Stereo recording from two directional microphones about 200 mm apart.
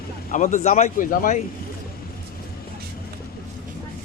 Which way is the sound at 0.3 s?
35° left (ahead or behind).